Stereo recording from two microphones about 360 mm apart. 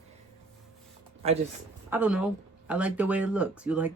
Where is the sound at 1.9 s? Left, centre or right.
Centre.